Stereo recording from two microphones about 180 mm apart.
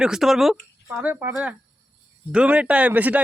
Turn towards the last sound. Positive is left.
turn(degrees=-10)  # may be behind; listen again after turning